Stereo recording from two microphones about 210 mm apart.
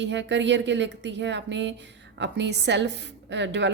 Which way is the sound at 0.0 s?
55° right (ahead or behind).